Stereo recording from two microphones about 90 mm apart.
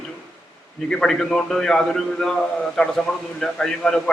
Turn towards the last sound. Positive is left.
turn(degrees=5)  # may be behind; listen again after turning